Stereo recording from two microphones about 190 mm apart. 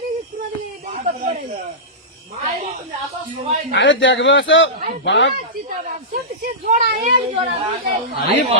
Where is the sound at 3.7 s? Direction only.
75° left (ahead or behind).